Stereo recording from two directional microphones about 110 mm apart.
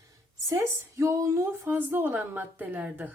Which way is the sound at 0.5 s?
25° right (ahead or behind).